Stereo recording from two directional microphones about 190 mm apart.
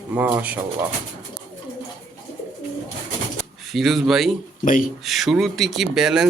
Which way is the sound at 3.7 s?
Centre (ahead or behind).